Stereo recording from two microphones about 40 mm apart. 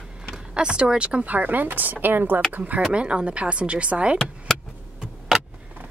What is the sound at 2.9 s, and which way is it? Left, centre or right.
Speech, right.